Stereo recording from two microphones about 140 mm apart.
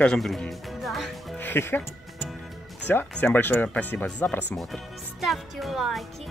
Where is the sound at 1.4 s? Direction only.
15° left (ahead or behind).